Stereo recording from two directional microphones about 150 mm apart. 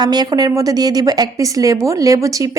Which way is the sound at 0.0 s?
25° right (ahead or behind).